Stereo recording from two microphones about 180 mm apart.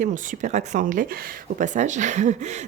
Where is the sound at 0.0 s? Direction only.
45° right (ahead or behind).